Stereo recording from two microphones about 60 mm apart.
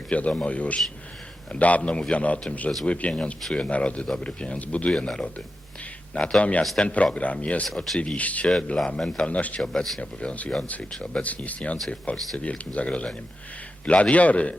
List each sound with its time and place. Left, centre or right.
0.1 s a man's voice: left
4.9 s a man's voice: centre
8.5 s a man's voice: centre
9.6 s speech: centre
10.0 s a man's voice: centre